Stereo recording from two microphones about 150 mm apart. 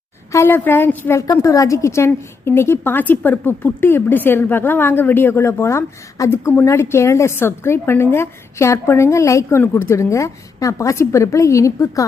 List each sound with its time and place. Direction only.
0.3 s a woman's voice: 15° left (ahead or behind)